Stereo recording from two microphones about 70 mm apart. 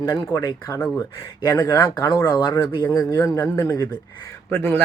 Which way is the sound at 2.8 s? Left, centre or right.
Left.